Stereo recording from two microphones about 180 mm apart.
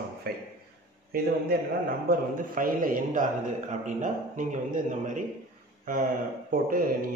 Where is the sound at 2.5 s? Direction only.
50° right (ahead or behind).